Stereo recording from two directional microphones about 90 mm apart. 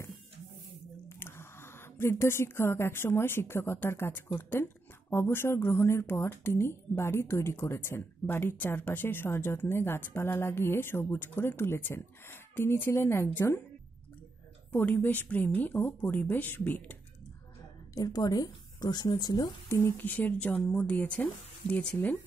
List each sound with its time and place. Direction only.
1.0 s a woman's voice: 25° left (ahead or behind)
14.7 s speech: 20° left (ahead or behind)
17.9 s a woman's voice: 45° left (ahead or behind)
19.7 s speech: 25° left (ahead or behind)